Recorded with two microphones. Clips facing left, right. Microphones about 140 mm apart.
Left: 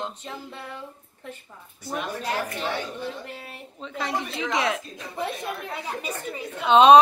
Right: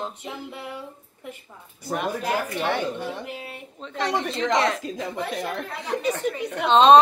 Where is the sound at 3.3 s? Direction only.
10° right (ahead or behind).